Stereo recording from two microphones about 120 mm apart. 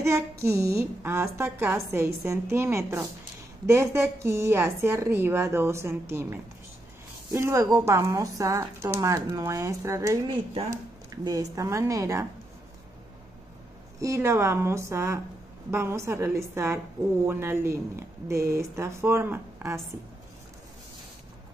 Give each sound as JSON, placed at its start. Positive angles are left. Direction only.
{"t": 0.0, "sound": "a woman's voice", "side_deg": -25}
{"t": 13.9, "sound": "a woman's voice", "side_deg": -25}